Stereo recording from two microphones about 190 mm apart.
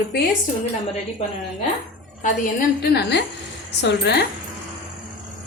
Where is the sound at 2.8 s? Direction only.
60° left (ahead or behind).